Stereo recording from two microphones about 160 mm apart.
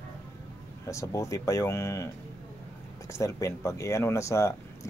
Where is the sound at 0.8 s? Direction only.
20° left (ahead or behind).